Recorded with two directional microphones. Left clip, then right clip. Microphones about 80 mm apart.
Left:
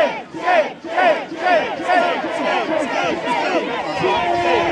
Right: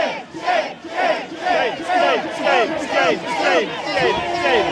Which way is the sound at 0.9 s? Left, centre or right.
Left.